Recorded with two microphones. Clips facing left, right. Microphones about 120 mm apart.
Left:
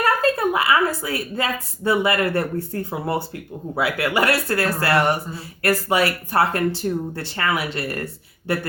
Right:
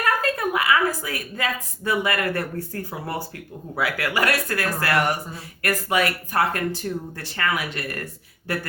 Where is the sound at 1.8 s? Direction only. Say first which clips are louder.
Left 4 dB; 25° left (ahead or behind).